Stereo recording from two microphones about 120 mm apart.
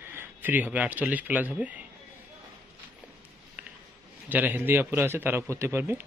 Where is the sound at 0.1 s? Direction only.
15° right (ahead or behind).